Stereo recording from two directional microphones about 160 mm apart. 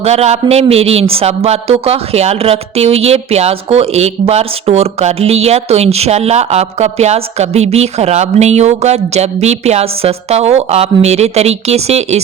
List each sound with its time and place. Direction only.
0.0 s a man's voice: 40° right (ahead or behind)